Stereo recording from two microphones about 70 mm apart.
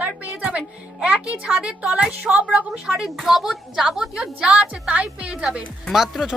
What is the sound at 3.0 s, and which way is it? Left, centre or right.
A woman's voice, centre.